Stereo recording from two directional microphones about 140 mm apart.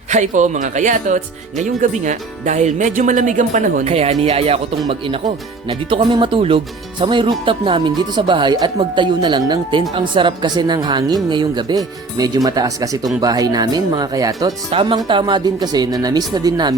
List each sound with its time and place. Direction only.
0.1 s a woman's voice: 60° right (ahead or behind); by 14.5 s 25° right (ahead or behind)
14.7 s a woman's voice: 40° right (ahead or behind)